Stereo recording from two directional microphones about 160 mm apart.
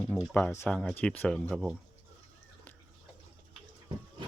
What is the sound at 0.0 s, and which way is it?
Speech, 5° left (ahead or behind).